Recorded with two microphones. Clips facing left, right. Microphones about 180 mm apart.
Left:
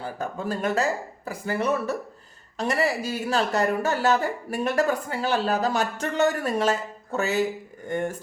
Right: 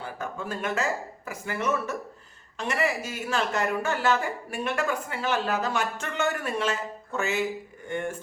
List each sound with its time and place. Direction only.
0.0 s a woman's voice: 35° left (ahead or behind)